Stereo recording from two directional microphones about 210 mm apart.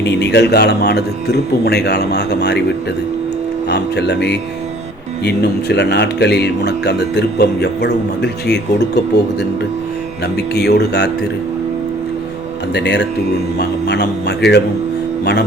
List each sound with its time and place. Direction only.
0.0 s speech: 55° left (ahead or behind)
3.7 s speech: 55° left (ahead or behind)
10.3 s speech: 50° left (ahead or behind)
12.7 s speech: 55° left (ahead or behind)